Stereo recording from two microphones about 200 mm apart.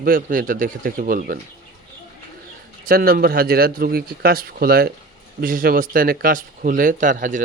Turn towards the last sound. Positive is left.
turn(degrees=-40)  # may be behind; listen again after turning